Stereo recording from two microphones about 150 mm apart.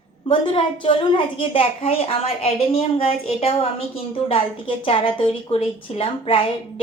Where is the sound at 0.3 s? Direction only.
35° left (ahead or behind).